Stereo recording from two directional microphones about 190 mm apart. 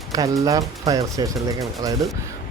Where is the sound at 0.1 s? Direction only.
20° right (ahead or behind).